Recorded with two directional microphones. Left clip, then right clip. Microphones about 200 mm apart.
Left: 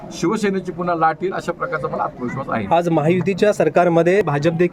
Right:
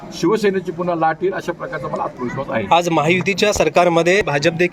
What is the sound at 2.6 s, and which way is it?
Speech, 40° left (ahead or behind).